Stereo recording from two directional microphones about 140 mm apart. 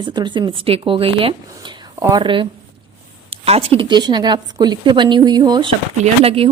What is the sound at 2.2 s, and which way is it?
A woman's voice, 35° right (ahead or behind).